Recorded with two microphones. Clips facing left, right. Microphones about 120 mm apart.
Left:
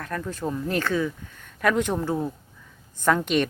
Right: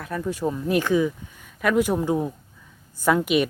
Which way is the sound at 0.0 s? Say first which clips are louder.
Right 4 dB; 10° right (ahead or behind).